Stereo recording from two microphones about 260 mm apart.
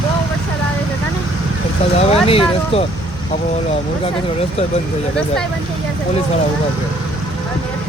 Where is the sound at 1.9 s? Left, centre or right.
Left.